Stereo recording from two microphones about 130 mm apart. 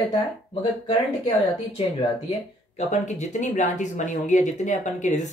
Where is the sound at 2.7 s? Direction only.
65° left (ahead or behind).